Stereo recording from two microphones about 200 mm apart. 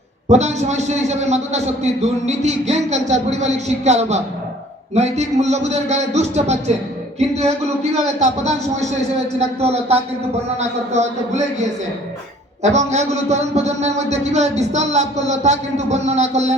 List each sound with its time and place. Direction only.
0.3 s a man's voice: 35° right (ahead or behind)
12.6 s a man's voice: 35° right (ahead or behind)